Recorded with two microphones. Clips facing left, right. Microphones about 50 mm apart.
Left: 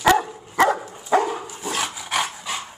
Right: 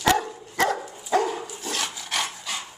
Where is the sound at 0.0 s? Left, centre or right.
Centre.